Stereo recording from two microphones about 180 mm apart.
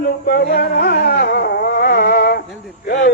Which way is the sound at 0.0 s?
60° left (ahead or behind).